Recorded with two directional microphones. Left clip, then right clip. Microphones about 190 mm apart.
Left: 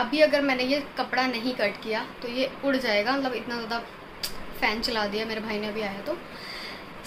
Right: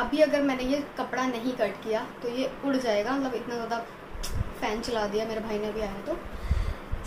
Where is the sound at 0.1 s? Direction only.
10° left (ahead or behind).